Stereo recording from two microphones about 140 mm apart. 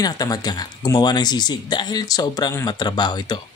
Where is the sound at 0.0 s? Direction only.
25° left (ahead or behind).